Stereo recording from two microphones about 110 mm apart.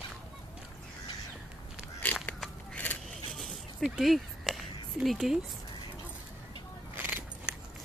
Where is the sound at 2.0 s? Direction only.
15° left (ahead or behind).